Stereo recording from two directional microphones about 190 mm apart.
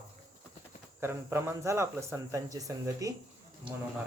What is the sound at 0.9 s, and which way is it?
Speech, 10° right (ahead or behind).